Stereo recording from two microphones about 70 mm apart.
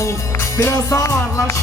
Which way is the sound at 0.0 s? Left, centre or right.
Left.